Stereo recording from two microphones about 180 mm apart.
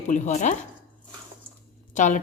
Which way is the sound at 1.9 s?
45° left (ahead or behind).